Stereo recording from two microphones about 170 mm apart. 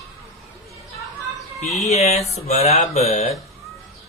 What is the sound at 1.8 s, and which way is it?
Speech, 40° left (ahead or behind).